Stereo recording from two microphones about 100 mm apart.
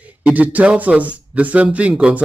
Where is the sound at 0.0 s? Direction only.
15° right (ahead or behind).